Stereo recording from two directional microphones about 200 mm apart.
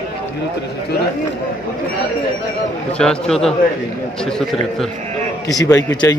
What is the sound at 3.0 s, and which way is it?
Speech, 5° left (ahead or behind).